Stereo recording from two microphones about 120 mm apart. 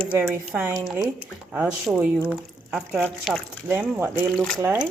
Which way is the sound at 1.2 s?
10° right (ahead or behind).